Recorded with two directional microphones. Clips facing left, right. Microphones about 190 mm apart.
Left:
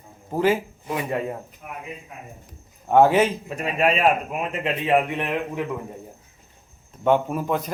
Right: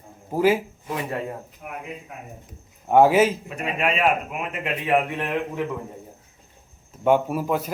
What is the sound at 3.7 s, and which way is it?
Speech, 35° left (ahead or behind).